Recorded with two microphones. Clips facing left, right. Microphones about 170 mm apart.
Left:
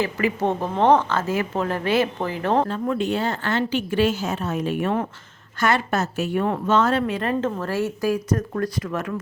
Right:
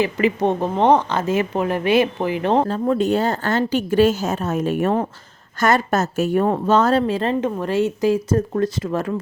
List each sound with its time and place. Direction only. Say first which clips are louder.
0.0 s speech: right 4 dB; 20° right (ahead or behind)
2.6 s a woman's voice: right 5 dB; 35° right (ahead or behind)
7.4 s speech: right 4 dB; 20° right (ahead or behind)